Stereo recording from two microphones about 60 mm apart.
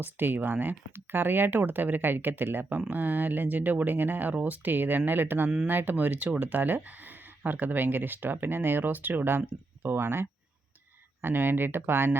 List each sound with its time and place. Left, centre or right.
0.0 s speech: right